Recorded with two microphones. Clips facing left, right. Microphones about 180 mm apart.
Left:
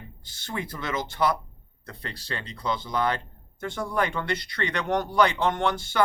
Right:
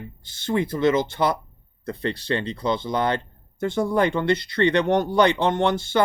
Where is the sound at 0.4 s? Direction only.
25° right (ahead or behind).